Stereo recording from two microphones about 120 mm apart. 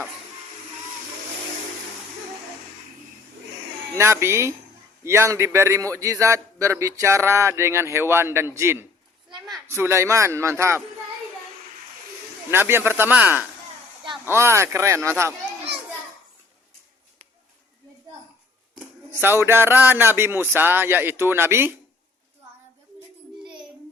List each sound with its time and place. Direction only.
3.9 s a man's voice: 20° right (ahead or behind)
12.5 s a man's voice: 20° right (ahead or behind)
19.2 s a man's voice: 20° right (ahead or behind)
23.4 s a sound: 40° right (ahead or behind)